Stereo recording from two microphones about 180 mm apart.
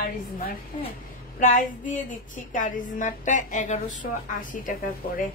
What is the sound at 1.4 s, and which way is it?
A woman's voice, 45° left (ahead or behind).